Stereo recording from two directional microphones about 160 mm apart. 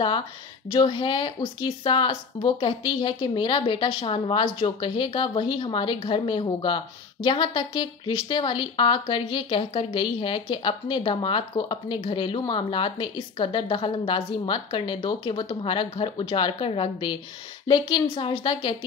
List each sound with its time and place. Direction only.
0.7 s a woman's voice: 30° left (ahead or behind)